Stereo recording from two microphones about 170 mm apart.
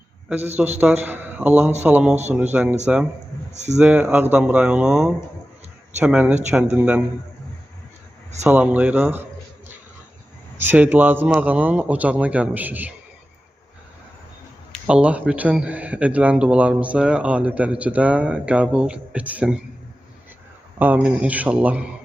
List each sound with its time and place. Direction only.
0.6 s speech: 5° right (ahead or behind)
3.5 s speech: 40° right (ahead or behind)
3.8 s speech: 5° right (ahead or behind)
8.4 s speech: 10° right (ahead or behind)
10.6 s speech: 10° right (ahead or behind)
14.8 s speech: 5° right (ahead or behind)
20.7 s speech: 10° right (ahead or behind)